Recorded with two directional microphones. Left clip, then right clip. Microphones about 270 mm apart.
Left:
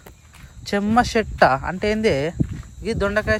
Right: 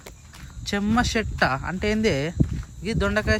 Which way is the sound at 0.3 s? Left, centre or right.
Centre.